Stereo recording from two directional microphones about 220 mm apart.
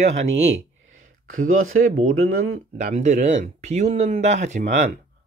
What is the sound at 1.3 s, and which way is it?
Speech, 65° right (ahead or behind).